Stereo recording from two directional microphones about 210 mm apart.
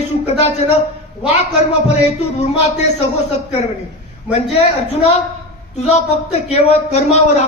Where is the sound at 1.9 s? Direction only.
30° left (ahead or behind).